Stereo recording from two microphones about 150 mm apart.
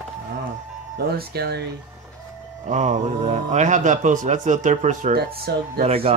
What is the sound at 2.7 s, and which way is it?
A man's voice, 50° right (ahead or behind).